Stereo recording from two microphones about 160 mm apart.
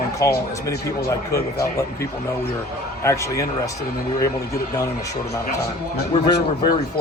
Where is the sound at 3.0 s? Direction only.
20° left (ahead or behind).